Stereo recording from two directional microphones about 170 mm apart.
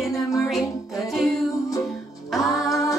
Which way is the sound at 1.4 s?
20° left (ahead or behind).